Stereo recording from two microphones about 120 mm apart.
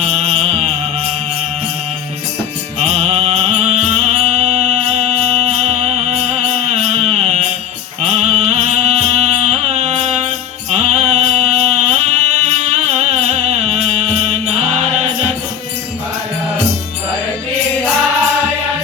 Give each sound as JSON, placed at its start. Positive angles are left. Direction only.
{"t": 0.0, "sound": "music", "side_deg": -60}
{"t": 2.7, "sound": "music", "side_deg": -60}